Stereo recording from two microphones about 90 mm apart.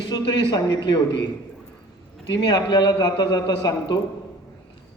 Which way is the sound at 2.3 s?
55° left (ahead or behind).